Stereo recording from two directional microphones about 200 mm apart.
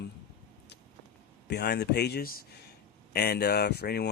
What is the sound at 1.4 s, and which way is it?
Speech, 55° left (ahead or behind).